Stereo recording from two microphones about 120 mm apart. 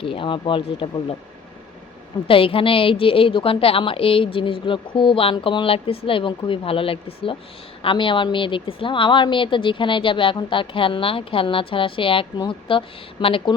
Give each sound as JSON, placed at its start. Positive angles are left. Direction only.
{"t": 0.0, "sound": "a woman's voice", "side_deg": 45}
{"t": 2.2, "sound": "a woman's voice", "side_deg": 50}